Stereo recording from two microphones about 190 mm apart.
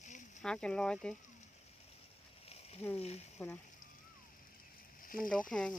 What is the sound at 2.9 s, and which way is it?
Speech, 35° left (ahead or behind).